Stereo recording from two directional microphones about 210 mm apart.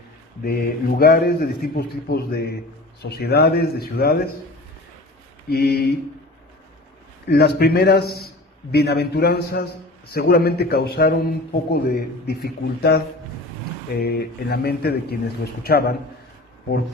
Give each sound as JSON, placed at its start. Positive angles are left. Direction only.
{"t": 0.4, "sound": "a man's voice", "side_deg": 45}
{"t": 5.5, "sound": "a man's voice", "side_deg": 50}
{"t": 7.3, "sound": "a man's voice", "side_deg": 50}